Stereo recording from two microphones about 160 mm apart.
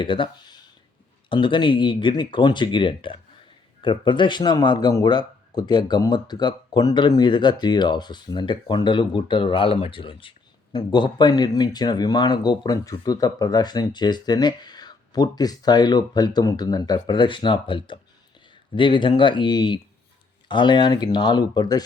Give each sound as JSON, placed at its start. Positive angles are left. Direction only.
{"t": 0.0, "sound": "speech", "side_deg": 30}